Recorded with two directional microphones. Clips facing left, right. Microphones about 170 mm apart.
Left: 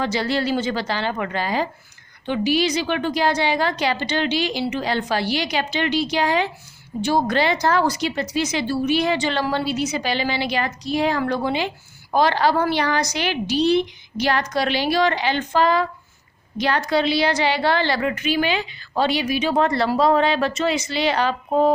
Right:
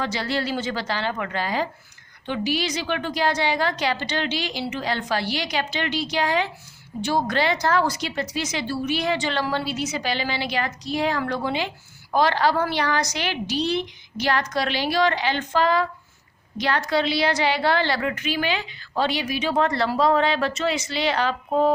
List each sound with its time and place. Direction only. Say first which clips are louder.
0.0 s a woman's voice: left 4 dB; 15° left (ahead or behind)
17.1 s a woman's voice: left 2 dB; centre (ahead or behind)
18.0 s a woman's voice: left 4 dB; 15° left (ahead or behind)